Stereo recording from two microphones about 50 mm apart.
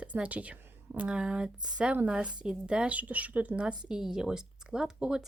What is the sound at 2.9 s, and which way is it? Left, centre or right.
Speech, right.